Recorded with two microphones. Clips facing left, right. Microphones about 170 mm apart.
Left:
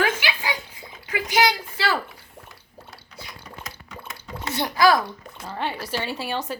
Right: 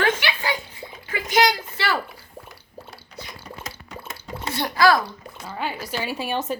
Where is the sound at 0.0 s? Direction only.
10° left (ahead or behind).